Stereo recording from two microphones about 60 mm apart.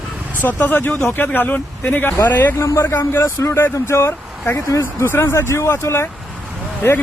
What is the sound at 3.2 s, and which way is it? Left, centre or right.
Speech, left.